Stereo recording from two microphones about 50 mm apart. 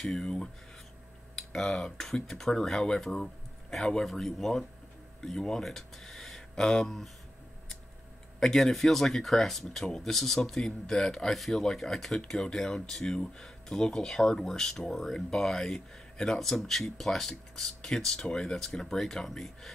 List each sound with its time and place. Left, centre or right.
0.0 s speech: centre
1.3 s tick-tock: centre
2.0 s speech: centre
8.4 s speech: centre